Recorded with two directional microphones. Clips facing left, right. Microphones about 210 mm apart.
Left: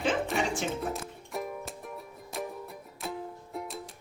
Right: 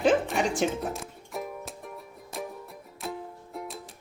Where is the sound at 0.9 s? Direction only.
Centre (ahead or behind).